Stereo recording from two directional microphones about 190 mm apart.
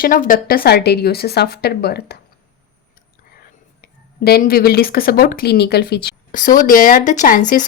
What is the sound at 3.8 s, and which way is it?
Speech, 55° left (ahead or behind).